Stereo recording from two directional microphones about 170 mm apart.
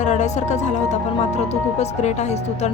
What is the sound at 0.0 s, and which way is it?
Speech, 45° left (ahead or behind).